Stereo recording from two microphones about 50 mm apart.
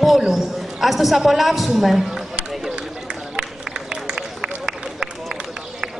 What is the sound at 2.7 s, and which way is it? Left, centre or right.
Run, centre.